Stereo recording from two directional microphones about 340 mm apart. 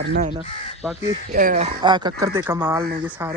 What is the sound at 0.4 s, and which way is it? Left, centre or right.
Speech, centre.